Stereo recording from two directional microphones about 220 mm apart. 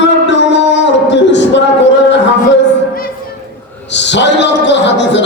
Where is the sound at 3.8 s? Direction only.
55° left (ahead or behind).